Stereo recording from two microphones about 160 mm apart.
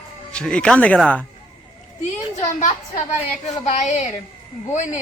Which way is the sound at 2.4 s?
50° left (ahead or behind).